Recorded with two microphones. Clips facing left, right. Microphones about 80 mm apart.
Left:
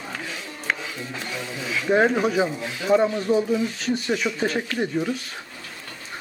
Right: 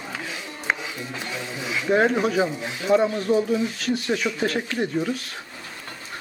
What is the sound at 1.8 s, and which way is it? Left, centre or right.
Speech, centre.